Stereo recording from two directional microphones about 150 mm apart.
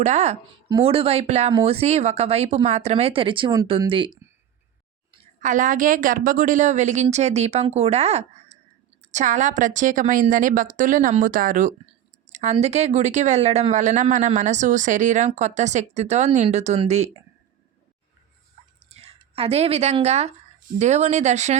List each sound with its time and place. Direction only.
0.0 s a woman's voice: 50° right (ahead or behind); by 4.2 s 35° right (ahead or behind)
5.4 s a woman's voice: 60° right (ahead or behind)
12.3 s a woman's voice: 50° right (ahead or behind)
18.9 s a woman's voice: 40° right (ahead or behind)